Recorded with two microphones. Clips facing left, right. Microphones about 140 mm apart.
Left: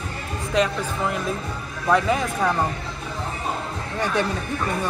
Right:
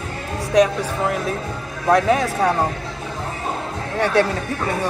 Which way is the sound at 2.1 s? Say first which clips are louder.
Right 4 dB; 75° right (ahead or behind).